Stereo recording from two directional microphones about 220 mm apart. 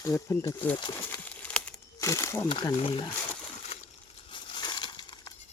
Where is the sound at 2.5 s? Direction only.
25° left (ahead or behind).